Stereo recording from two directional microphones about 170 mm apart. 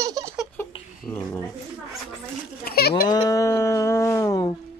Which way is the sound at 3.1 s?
20° left (ahead or behind).